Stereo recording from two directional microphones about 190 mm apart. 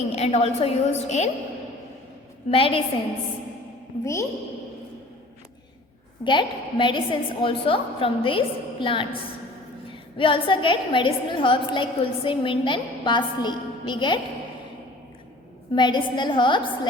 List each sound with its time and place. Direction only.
0.1 s a woman's voice: 35° left (ahead or behind)
2.5 s a woman's voice: 30° left (ahead or behind)
4.0 s a woman's voice: 15° left (ahead or behind)
6.2 s a woman's voice: 25° left (ahead or behind)
15.7 s a woman's voice: 25° left (ahead or behind)